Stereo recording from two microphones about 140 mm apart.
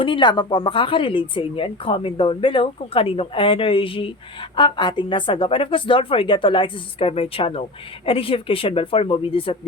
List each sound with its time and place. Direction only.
0.0 s speech: 35° left (ahead or behind)